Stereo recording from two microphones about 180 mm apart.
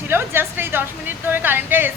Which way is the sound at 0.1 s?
10° right (ahead or behind).